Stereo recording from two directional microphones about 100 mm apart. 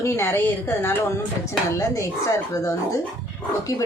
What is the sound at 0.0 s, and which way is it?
A woman's voice, 25° left (ahead or behind).